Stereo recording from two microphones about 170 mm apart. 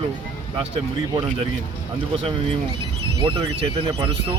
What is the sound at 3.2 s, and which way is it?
Speech, 35° right (ahead or behind).